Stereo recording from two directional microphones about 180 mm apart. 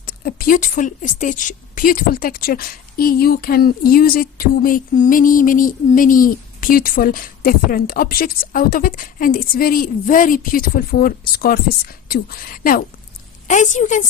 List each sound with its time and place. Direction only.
0.0 s a woman's voice: 55° left (ahead or behind)